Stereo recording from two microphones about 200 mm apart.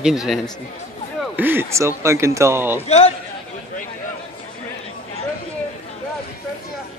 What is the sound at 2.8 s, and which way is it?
Speech, 35° left (ahead or behind).